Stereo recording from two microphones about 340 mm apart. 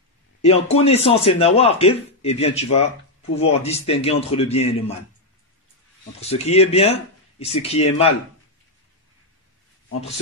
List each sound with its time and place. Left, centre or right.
0.7 s a man's voice: centre
6.2 s a man's voice: centre